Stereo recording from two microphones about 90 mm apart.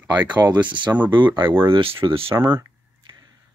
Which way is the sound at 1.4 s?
25° right (ahead or behind).